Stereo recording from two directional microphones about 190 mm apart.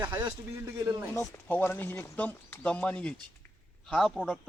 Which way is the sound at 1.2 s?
10° left (ahead or behind).